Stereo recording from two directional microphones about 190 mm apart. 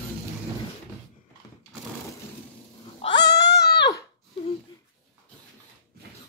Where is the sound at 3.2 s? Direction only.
65° left (ahead or behind).